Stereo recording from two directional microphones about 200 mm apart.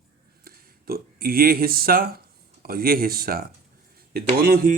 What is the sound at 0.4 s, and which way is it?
Speech, 50° right (ahead or behind).